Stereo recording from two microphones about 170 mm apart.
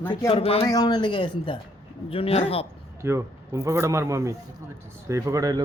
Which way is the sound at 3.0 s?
15° right (ahead or behind).